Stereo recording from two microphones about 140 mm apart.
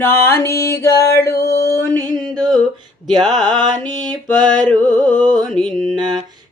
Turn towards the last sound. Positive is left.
turn(degrees=0)  # may be behind; listen again after turning